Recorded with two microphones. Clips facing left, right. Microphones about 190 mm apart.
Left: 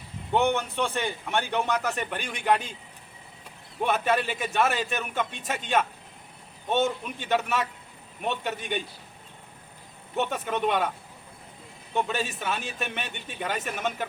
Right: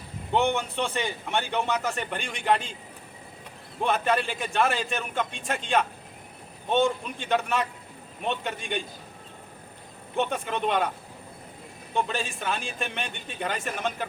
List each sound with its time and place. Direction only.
0.3 s a man's voice: 15° right (ahead or behind)
1.8 s a man's voice: centre (ahead or behind)
3.8 s a man's voice: 5° left (ahead or behind)
10.2 s a man's voice: 5° left (ahead or behind)
11.9 s a man's voice: 5° left (ahead or behind)